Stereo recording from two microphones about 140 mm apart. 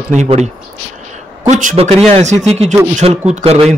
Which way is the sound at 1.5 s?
65° right (ahead or behind).